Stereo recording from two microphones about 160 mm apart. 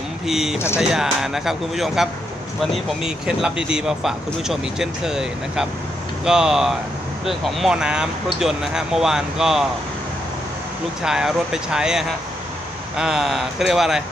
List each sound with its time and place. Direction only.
0.3 s speech: centre (ahead or behind)
11.0 s speech: 5° right (ahead or behind)